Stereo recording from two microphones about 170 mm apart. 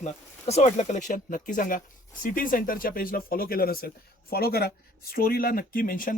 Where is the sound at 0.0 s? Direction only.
40° left (ahead or behind).